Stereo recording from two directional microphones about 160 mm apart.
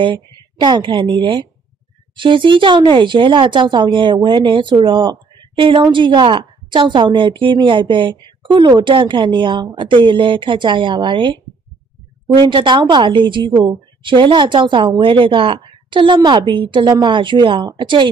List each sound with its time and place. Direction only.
0.0 s a woman's voice: 30° right (ahead or behind)